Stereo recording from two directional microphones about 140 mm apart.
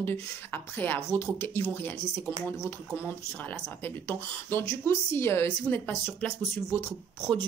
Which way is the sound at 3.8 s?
15° left (ahead or behind).